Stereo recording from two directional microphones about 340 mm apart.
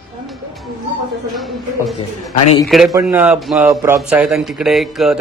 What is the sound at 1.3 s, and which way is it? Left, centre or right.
A man's voice, centre.